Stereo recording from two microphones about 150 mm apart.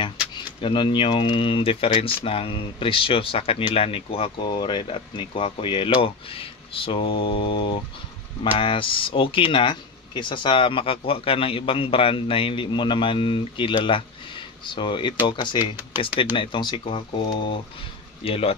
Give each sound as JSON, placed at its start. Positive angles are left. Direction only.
{"t": 0.6, "sound": "speech", "side_deg": 35}